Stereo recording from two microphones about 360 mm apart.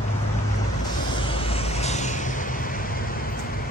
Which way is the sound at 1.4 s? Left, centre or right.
Centre.